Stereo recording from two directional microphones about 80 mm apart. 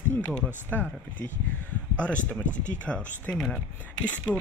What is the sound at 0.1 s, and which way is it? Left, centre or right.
Speech, centre.